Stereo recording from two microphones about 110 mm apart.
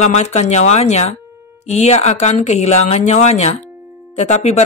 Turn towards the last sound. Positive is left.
turn(degrees=85)